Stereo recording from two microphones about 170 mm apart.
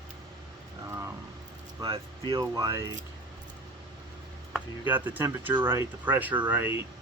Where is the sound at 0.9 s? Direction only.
15° right (ahead or behind).